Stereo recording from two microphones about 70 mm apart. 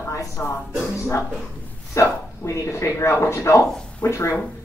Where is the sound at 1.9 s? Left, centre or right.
Left.